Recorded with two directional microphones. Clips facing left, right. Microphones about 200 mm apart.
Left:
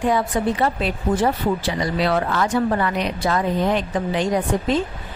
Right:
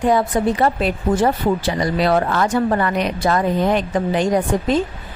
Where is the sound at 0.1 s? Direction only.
45° right (ahead or behind).